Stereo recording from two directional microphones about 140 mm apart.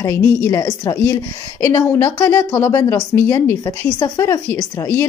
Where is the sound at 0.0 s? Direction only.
20° left (ahead or behind).